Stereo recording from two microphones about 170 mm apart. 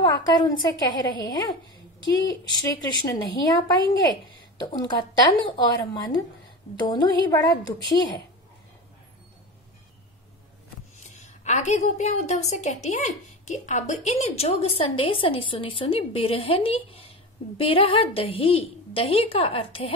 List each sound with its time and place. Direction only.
0.0 s speech: 25° left (ahead or behind)
11.1 s a woman's voice: 45° left (ahead or behind)